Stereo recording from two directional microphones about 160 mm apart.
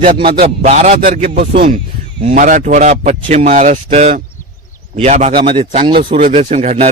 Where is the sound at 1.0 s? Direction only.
65° right (ahead or behind).